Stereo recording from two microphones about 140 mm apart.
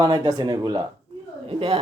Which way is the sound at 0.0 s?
30° right (ahead or behind).